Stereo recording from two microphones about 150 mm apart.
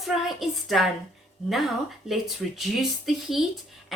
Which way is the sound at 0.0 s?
Centre (ahead or behind).